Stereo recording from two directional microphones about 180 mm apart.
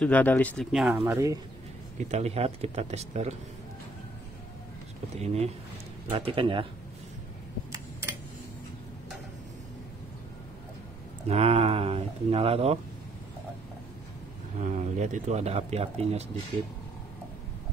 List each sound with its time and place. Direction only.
0.0 s speech: 10° left (ahead or behind)
0.7 s speech: 5° right (ahead or behind)
1.0 s speech: 15° right (ahead or behind)
2.0 s speech: 35° right (ahead or behind)
5.2 s speech: 35° right (ahead or behind)
11.2 s speech: 35° right (ahead or behind)
14.6 s speech: 40° right (ahead or behind)